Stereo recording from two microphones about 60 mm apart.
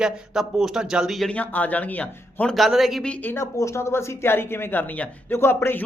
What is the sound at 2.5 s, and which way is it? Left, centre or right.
Speech, centre.